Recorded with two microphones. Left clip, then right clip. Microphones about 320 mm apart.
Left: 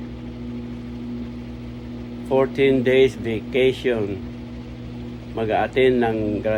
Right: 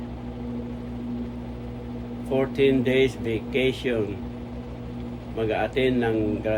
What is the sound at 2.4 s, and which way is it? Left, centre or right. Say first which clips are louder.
Speech: left 4 dB; left.